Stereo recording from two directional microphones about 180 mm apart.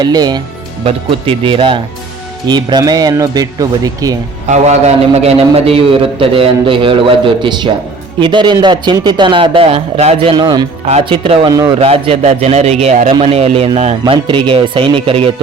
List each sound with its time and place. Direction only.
0.0 s a man's voice: 20° right (ahead or behind)
4.5 s a man's voice: 40° right (ahead or behind)
10.3 s a man's voice: 25° right (ahead or behind)
10.8 s a man's voice: 35° right (ahead or behind)
11.8 s a man's voice: 30° right (ahead or behind)